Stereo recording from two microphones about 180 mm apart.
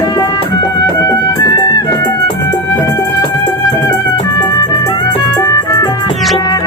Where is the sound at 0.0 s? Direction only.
20° left (ahead or behind).